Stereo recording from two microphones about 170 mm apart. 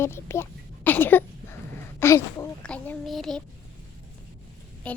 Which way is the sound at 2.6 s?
5° left (ahead or behind).